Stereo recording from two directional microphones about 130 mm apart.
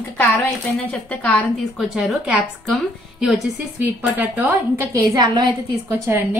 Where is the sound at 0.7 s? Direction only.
10° left (ahead or behind).